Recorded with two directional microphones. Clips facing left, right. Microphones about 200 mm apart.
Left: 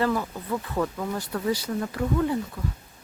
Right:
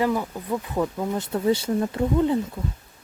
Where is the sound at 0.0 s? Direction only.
15° right (ahead or behind).